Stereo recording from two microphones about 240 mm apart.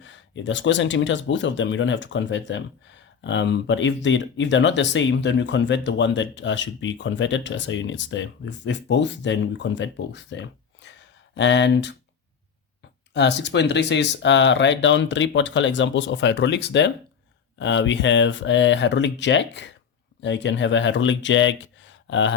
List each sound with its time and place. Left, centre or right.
0.0 s speech: left
13.1 s speech: left